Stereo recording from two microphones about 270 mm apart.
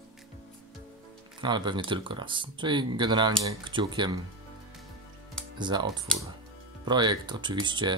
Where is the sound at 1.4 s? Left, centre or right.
Centre.